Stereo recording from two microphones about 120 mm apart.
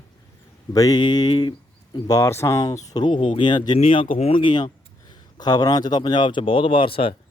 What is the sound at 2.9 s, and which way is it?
Speech, 35° left (ahead or behind).